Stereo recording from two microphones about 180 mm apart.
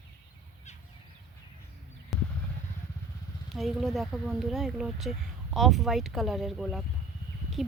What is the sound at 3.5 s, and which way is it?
Speech, centre (ahead or behind).